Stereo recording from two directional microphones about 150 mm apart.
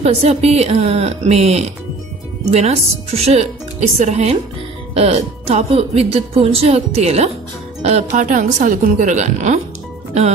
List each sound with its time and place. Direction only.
0.0 s speech: 45° right (ahead or behind)